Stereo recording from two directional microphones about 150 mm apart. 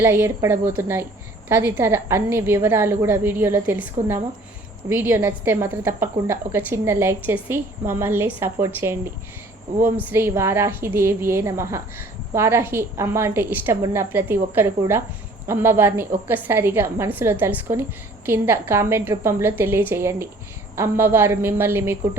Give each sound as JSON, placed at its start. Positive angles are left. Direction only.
{"t": 0.0, "sound": "a woman's voice", "side_deg": -15}
{"t": 4.9, "sound": "a woman's voice", "side_deg": -15}